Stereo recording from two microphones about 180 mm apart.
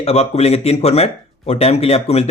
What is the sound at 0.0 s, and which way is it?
Speech, 35° left (ahead or behind).